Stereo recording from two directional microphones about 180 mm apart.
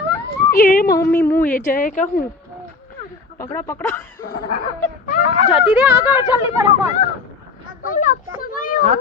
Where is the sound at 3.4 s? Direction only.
15° left (ahead or behind).